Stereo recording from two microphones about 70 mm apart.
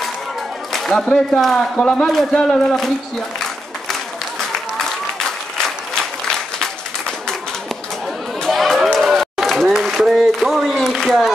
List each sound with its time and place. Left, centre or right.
0.7 s a man's voice: centre
6.2 s applause: centre
8.4 s run: centre
9.0 s a sound: centre